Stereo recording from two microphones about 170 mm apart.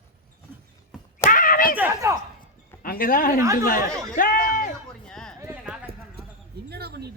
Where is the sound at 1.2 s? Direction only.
55° left (ahead or behind).